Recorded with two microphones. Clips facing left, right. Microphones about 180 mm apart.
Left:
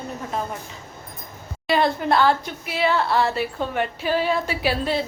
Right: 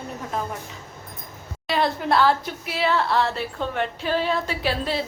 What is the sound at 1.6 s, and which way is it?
Speech, centre (ahead or behind).